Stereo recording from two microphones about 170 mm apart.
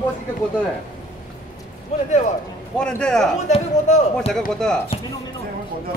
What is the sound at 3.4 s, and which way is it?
Speech, 45° left (ahead or behind).